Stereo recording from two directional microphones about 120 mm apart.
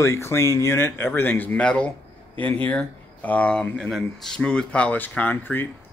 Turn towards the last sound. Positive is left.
turn(degrees=15)  # may be behind; listen again after turning